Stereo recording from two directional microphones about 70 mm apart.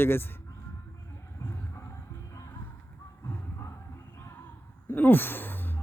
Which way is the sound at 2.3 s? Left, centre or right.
Left.